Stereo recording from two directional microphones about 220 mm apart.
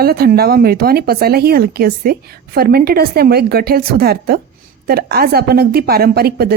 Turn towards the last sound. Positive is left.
turn(degrees=-45)  # may be behind; listen again after turning